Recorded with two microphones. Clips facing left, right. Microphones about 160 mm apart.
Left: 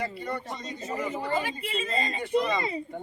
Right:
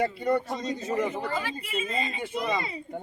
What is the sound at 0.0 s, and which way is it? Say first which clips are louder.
Speech: right 7 dB; 55° right (ahead or behind).